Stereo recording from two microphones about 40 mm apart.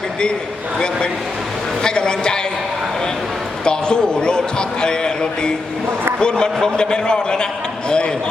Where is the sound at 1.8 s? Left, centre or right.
Left.